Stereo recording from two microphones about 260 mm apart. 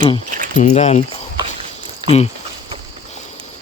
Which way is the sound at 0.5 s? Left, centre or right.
Left.